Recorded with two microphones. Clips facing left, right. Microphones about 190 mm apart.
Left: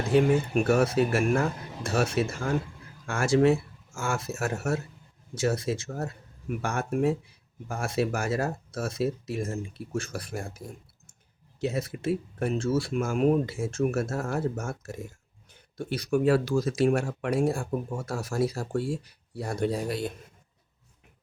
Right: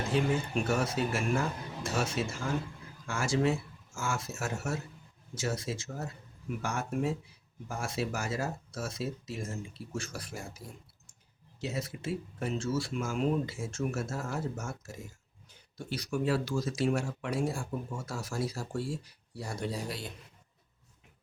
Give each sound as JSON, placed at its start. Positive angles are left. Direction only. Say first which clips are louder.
{"t": 0.1, "sound": "speech", "louder": "left 8 dB", "side_deg": 60}